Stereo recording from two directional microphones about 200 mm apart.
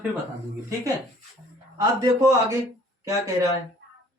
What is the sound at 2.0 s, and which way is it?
Speech, 15° right (ahead or behind).